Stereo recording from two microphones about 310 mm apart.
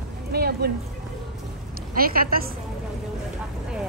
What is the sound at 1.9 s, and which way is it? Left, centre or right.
Speech, right.